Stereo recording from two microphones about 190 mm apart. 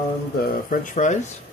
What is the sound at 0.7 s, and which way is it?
Speech, 40° left (ahead or behind).